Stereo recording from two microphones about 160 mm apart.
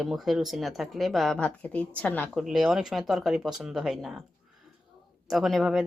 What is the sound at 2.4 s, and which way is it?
Speech, centre (ahead or behind).